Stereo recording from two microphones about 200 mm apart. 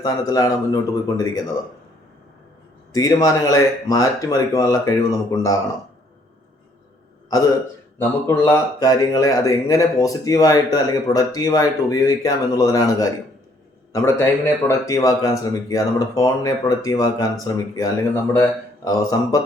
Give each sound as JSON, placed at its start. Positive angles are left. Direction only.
{"t": 0.0, "sound": "speech", "side_deg": 15}
{"t": 2.9, "sound": "speech", "side_deg": 15}
{"t": 7.9, "sound": "speech", "side_deg": 15}